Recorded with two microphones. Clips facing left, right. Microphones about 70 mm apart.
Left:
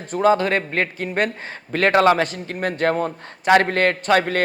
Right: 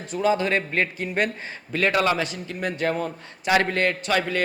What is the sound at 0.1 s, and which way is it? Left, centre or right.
Speech, left.